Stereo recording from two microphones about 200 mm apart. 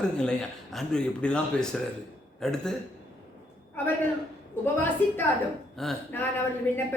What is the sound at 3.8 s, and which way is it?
Speech, 10° left (ahead or behind).